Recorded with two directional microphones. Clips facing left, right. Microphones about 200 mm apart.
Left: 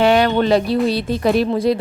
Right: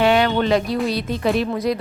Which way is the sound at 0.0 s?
40° left (ahead or behind).